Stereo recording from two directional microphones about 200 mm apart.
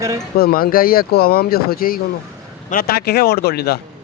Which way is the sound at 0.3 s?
50° left (ahead or behind).